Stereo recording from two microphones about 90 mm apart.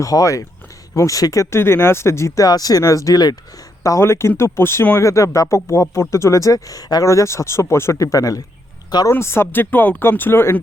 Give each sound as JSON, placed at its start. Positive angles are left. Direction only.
{"t": 0.0, "sound": "speech", "side_deg": 40}
{"t": 3.8, "sound": "speech", "side_deg": 35}
{"t": 9.0, "sound": "speech", "side_deg": 30}